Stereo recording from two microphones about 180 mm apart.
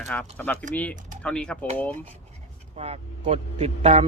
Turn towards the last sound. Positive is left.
turn(degrees=-35)  # may be behind; listen again after turning